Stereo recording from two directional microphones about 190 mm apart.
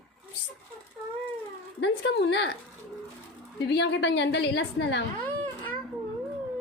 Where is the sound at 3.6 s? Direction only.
65° left (ahead or behind).